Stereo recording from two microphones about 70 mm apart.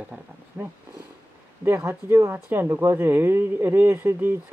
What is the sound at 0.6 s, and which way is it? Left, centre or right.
Speech, centre.